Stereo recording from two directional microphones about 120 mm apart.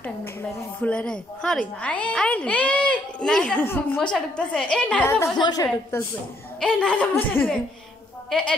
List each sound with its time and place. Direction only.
0.0 s a woman's voice: 15° left (ahead or behind)
3.6 s a woman's voice: 20° left (ahead or behind)
4.0 s a woman's voice: 10° left (ahead or behind)
5.4 s a woman's voice: 35° left (ahead or behind)
6.6 s a woman's voice: 10° left (ahead or behind)